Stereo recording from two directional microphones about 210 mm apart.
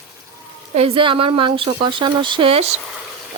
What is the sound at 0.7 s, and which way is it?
Speech, 25° right (ahead or behind).